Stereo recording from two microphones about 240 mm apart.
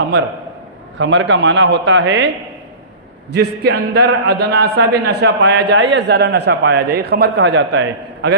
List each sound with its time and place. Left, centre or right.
0.9 s a man's voice: right
3.3 s a man's voice: right